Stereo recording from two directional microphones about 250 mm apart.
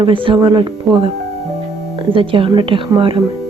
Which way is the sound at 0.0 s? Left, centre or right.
Right.